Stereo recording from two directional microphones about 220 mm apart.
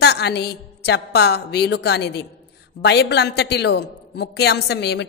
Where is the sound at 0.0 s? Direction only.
50° left (ahead or behind).